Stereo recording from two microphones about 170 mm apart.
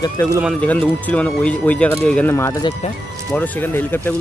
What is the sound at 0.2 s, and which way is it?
Speech, 15° left (ahead or behind).